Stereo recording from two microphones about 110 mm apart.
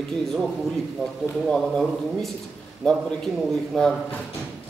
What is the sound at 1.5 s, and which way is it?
A man's voice, 5° left (ahead or behind).